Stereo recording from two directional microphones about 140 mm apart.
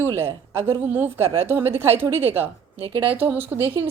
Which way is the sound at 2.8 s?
40° right (ahead or behind).